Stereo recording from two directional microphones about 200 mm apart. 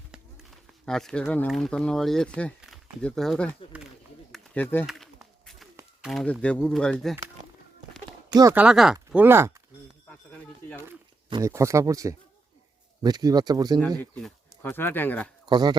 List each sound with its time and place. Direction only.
0.7 s speech: centre (ahead or behind)
4.3 s a sound: 10° left (ahead or behind)
6.0 s speech: centre (ahead or behind)
8.3 s speech: 20° right (ahead or behind)
8.5 s speech: 5° right (ahead or behind)
11.3 s speech: 15° right (ahead or behind)
14.0 s speech: 5° left (ahead or behind)
15.4 s speech: 20° right (ahead or behind)